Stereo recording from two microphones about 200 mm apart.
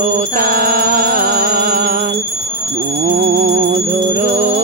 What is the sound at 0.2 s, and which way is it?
Music, 45° right (ahead or behind).